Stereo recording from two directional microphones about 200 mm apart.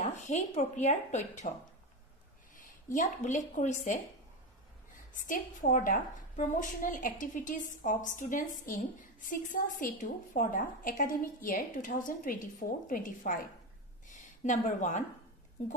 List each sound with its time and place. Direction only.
0.0 s a woman's voice: 35° left (ahead or behind)
2.5 s speech: 40° left (ahead or behind)
5.2 s a woman's voice: 40° left (ahead or behind)